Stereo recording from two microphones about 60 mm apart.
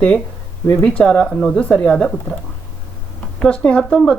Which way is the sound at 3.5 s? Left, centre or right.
Centre.